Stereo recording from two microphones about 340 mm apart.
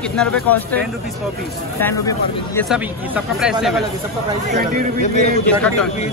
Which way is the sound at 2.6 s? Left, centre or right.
Centre.